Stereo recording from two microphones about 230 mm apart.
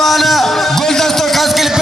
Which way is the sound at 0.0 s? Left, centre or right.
Centre.